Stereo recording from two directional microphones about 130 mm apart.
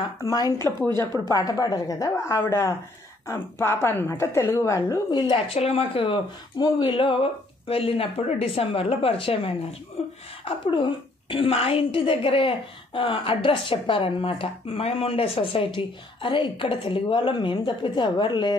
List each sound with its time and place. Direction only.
0.2 s a woman's voice: 30° left (ahead or behind)
5.3 s speech: 50° left (ahead or behind)
10.4 s a woman's voice: 40° left (ahead or behind)